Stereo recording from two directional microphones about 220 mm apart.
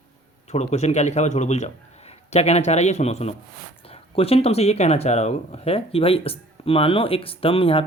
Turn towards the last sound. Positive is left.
turn(degrees=25)  # may be behind; listen again after turning